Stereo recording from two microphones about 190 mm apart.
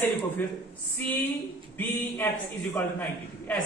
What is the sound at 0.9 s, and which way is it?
A man's voice, 10° left (ahead or behind).